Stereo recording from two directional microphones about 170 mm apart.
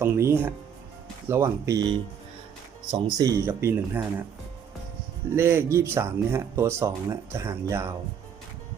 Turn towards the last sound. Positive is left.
turn(degrees=-15)  # may be behind; listen again after turning